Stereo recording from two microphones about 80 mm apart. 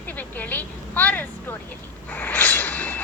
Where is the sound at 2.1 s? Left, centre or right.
Left.